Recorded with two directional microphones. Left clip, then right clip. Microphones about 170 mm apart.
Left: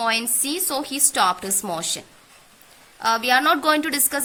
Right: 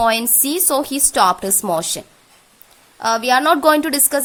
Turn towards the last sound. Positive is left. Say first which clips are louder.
# right 5 dB
turn(degrees=-50)  # may be behind; listen again after turning